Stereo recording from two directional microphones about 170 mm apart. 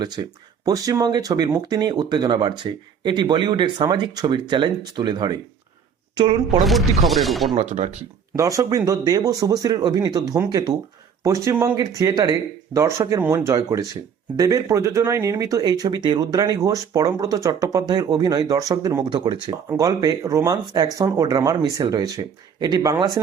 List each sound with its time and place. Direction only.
0.0 s speech: 25° right (ahead or behind)
7.0 s speech: centre (ahead or behind)
7.5 s speech: 40° right (ahead or behind)
8.4 s speech: 20° right (ahead or behind)